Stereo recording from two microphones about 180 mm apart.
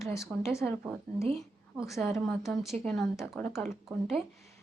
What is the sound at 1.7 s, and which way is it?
Speech, centre (ahead or behind).